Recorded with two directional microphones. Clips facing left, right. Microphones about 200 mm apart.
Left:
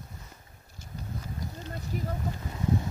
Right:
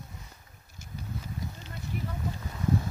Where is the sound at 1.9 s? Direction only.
35° left (ahead or behind).